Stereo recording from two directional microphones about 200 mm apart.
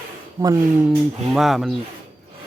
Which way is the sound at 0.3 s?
15° right (ahead or behind).